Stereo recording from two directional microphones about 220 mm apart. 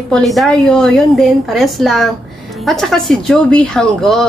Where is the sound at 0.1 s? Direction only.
Centre (ahead or behind).